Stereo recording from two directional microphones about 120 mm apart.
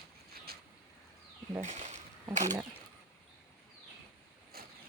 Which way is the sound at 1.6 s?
75° right (ahead or behind).